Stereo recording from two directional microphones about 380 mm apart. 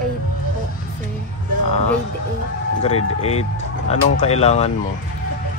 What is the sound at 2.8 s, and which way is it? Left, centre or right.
Speech, centre.